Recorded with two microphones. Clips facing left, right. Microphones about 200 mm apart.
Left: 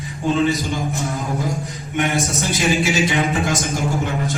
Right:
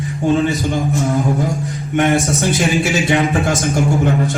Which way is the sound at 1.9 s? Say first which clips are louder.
Right 6 dB; 50° right (ahead or behind).